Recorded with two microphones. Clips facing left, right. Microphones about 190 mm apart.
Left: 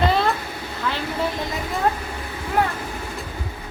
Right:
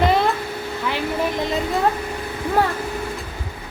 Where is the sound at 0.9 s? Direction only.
15° right (ahead or behind).